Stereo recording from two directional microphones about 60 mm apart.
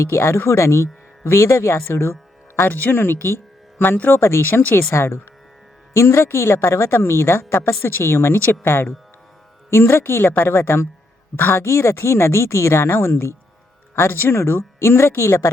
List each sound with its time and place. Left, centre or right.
0.0 s speech: left